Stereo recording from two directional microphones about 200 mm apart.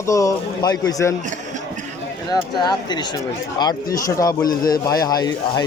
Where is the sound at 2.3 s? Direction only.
20° left (ahead or behind).